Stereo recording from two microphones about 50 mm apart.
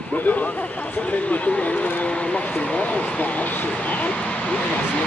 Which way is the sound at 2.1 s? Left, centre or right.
Left.